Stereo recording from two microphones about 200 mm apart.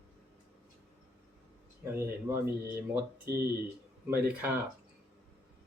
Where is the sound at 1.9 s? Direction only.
10° right (ahead or behind).